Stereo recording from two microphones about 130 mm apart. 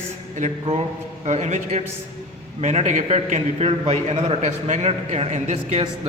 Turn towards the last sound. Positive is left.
turn(degrees=-55)  # may be behind; listen again after turning